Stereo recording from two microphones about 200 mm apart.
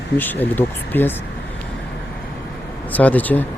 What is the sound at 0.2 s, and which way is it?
Speech, 10° left (ahead or behind).